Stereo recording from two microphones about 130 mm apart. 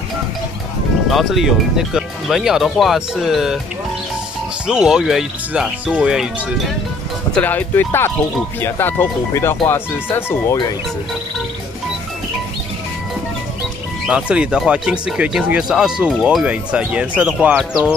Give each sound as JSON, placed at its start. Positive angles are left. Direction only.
{"t": 1.1, "sound": "speech", "side_deg": 0}
{"t": 4.6, "sound": "speech", "side_deg": -5}
{"t": 7.3, "sound": "speech", "side_deg": 15}
{"t": 14.0, "sound": "speech", "side_deg": -10}